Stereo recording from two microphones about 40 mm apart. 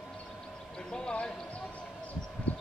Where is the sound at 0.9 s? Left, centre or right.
Left.